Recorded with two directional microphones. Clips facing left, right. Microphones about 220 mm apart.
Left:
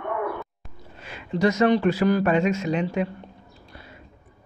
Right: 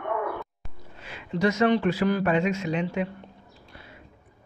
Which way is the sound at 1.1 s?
40° left (ahead or behind).